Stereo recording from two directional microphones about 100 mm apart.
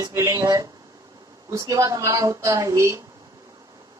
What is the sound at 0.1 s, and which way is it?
Speech, 30° right (ahead or behind).